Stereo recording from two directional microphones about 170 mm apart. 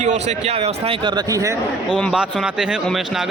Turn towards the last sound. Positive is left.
turn(degrees=0)  # may be behind; listen again after turning